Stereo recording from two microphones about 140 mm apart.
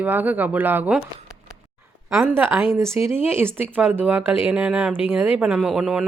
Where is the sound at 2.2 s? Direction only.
15° right (ahead or behind).